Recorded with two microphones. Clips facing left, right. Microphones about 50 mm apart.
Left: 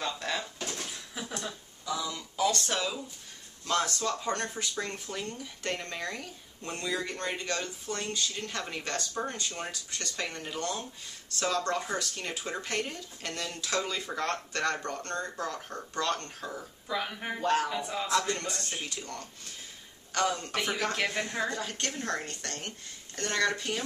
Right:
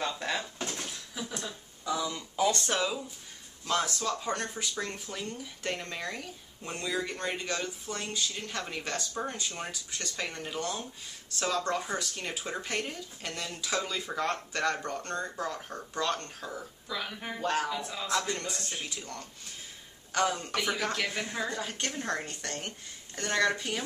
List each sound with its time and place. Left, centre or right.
0.0 s dishes: centre
1.9 s a woman's voice: right; by 16.6 s centre
16.8 s speech: centre
17.4 s speech: centre
17.7 s speech: centre
18.9 s speech: centre
20.1 s a man's voice: centre
20.5 s speech: centre
21.5 s a woman's voice: centre